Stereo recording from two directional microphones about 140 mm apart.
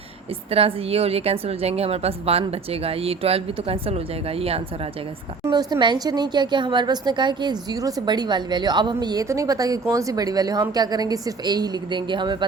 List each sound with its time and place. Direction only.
0.5 s a woman's voice: 45° right (ahead or behind)
5.5 s a woman's voice: 30° right (ahead or behind)